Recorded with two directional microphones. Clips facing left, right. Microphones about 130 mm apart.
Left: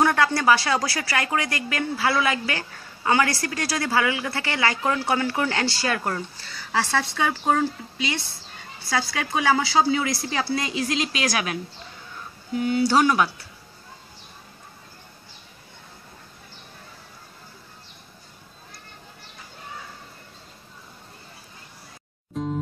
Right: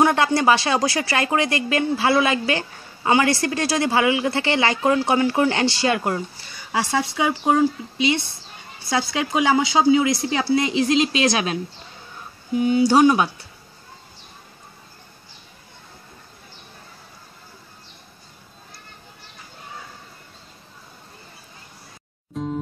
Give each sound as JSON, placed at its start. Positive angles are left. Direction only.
{"t": 0.0, "sound": "speech", "side_deg": -20}
{"t": 12.5, "sound": "speech", "side_deg": -20}
{"t": 22.3, "sound": "music", "side_deg": 0}